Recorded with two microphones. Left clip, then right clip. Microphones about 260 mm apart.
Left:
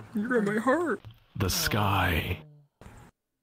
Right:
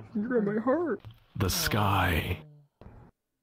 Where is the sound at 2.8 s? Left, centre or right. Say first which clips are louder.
Left 3 dB; left.